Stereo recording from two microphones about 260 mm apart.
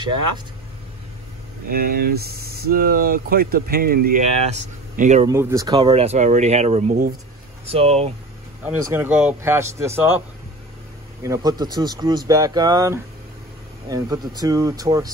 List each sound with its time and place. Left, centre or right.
1.7 s speech: right
5.3 s speech: centre
8.9 s speech: centre
11.2 s speech: centre